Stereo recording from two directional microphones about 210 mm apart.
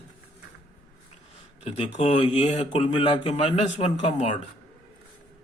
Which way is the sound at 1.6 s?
30° left (ahead or behind).